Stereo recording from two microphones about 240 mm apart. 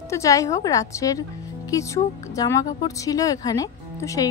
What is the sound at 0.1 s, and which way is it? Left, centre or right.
Speech, centre.